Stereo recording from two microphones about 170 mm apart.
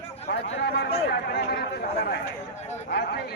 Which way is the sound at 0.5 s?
80° left.